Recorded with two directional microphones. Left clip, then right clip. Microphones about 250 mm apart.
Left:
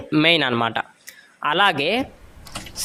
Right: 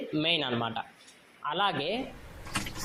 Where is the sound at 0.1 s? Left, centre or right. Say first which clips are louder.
Left 12 dB; left.